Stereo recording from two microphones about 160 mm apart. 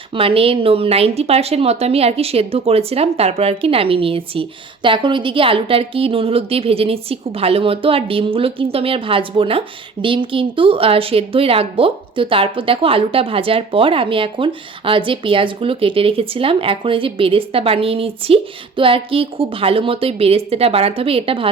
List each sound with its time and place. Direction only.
0.1 s a woman's voice: 35° right (ahead or behind)